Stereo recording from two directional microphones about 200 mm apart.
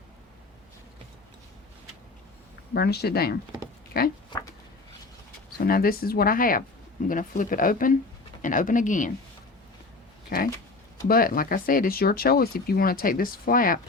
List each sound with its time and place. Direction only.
2.7 s speech: 55° left (ahead or behind)
4.3 s speech: 20° left (ahead or behind)
5.6 s speech: 45° left (ahead or behind)
10.2 s speech: 45° left (ahead or behind)